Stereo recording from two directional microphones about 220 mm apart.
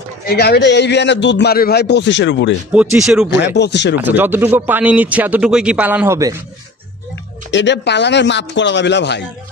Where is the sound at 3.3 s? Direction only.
50° left (ahead or behind).